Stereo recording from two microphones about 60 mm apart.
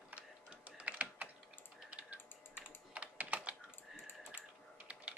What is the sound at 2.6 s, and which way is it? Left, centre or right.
Typing, right.